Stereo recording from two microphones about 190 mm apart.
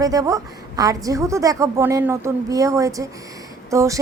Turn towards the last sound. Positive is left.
turn(degrees=-15)  # may be behind; listen again after turning